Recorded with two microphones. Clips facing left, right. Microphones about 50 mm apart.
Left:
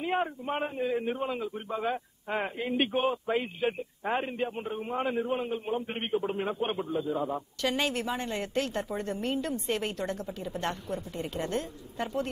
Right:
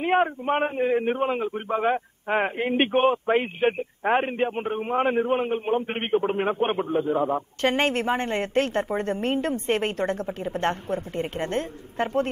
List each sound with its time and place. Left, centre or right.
0.0 s a man's voice: right